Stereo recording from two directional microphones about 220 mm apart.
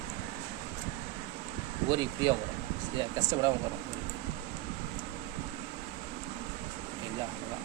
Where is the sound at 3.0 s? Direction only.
20° right (ahead or behind).